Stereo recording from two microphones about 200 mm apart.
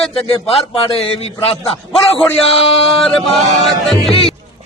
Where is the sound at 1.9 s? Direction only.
Centre (ahead or behind).